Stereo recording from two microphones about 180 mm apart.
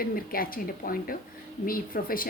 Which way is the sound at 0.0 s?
55° left (ahead or behind).